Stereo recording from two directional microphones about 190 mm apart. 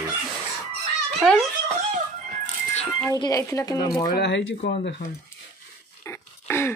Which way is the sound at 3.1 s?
20° left (ahead or behind).